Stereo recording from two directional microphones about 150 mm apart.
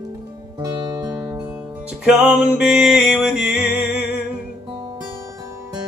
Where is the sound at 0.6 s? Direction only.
25° right (ahead or behind).